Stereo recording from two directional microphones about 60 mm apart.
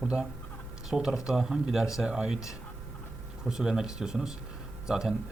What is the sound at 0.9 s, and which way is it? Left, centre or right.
Speech, centre.